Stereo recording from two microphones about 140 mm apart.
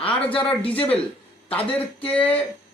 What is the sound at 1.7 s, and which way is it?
Speech, 10° left (ahead or behind).